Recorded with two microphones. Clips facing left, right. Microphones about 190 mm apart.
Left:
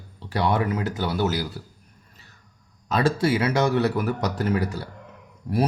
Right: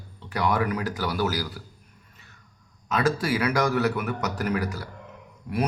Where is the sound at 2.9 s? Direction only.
30° left (ahead or behind).